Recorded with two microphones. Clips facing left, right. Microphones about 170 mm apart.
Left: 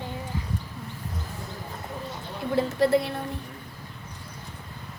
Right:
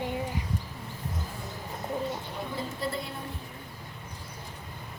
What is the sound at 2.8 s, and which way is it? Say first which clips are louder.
Speech: left 13 dB; 75° left (ahead or behind).